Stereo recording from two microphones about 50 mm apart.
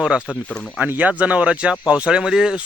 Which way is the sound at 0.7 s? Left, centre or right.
Right.